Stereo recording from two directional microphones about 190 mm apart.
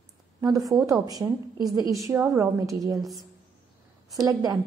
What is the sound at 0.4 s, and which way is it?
A woman's voice, 20° right (ahead or behind).